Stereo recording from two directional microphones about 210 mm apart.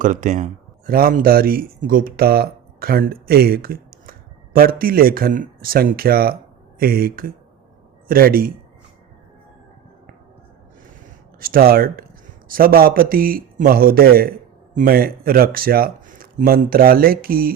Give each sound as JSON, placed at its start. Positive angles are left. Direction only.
{"t": 0.0, "sound": "speech", "side_deg": -35}
{"t": 11.3, "sound": "speech", "side_deg": -45}